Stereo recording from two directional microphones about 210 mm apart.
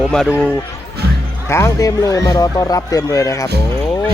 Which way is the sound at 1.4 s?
15° left (ahead or behind).